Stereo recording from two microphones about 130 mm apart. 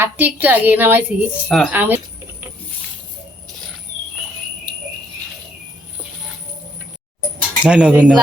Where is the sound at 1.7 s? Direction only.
15° right (ahead or behind).